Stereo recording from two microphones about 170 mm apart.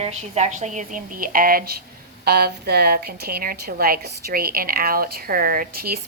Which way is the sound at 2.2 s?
70° right (ahead or behind).